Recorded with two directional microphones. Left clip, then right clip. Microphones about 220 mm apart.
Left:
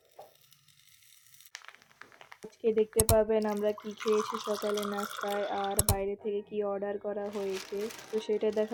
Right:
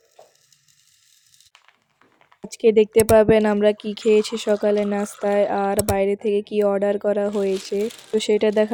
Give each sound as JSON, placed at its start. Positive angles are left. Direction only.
{"t": 2.5, "sound": "speech", "side_deg": -50}
{"t": 5.7, "sound": "speech", "side_deg": 0}
{"t": 6.0, "sound": "speech", "side_deg": -50}